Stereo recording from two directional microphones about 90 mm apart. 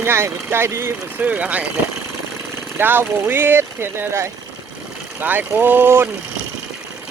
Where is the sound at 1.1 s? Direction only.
15° right (ahead or behind).